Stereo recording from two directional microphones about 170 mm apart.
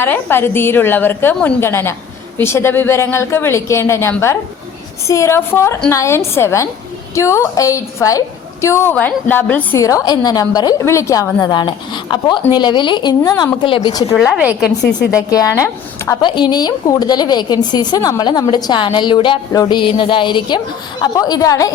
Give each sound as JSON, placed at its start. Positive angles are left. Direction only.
{"t": 0.0, "sound": "a woman's voice", "side_deg": 15}
{"t": 14.2, "sound": "a woman's voice", "side_deg": -5}
{"t": 15.3, "sound": "speech", "side_deg": 20}